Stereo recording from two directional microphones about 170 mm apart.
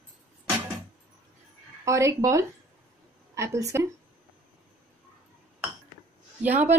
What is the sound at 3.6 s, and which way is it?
Speech, 20° right (ahead or behind).